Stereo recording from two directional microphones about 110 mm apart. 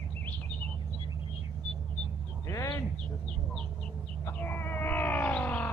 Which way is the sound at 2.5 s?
25° left (ahead or behind).